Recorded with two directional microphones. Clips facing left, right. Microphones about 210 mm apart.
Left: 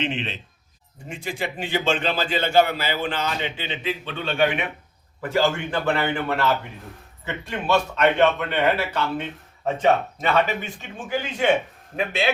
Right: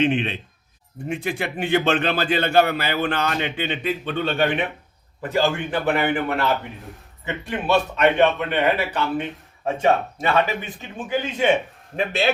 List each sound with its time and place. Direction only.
0.0 s a man's voice: 55° right (ahead or behind)
5.3 s a man's voice: 15° right (ahead or behind)
11.9 s a man's voice: 35° right (ahead or behind)